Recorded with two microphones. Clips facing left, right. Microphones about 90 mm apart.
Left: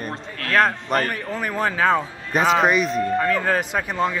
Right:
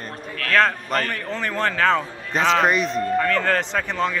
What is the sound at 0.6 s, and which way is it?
Speech, 10° left (ahead or behind).